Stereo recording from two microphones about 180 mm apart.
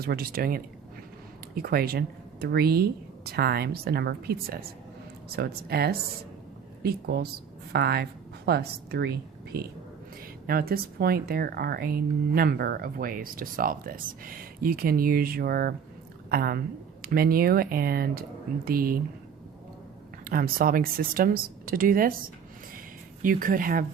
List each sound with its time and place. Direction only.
0.0 s a woman's voice: 55° right (ahead or behind)
20.2 s speech: 55° right (ahead or behind)
23.2 s speech: 50° right (ahead or behind)